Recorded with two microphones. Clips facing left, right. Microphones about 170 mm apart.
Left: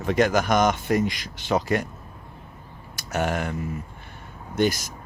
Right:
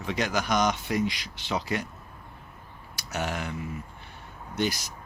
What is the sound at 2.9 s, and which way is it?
Speech, 50° left (ahead or behind).